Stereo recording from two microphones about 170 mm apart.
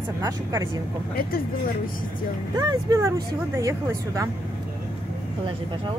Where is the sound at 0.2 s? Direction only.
20° right (ahead or behind).